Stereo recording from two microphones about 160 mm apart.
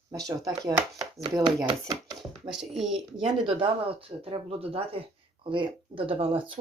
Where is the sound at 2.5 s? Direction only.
Centre (ahead or behind).